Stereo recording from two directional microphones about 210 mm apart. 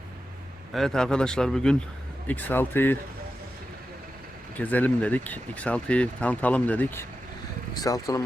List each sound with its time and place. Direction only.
0.7 s speech: centre (ahead or behind)
4.5 s speech: 5° left (ahead or behind)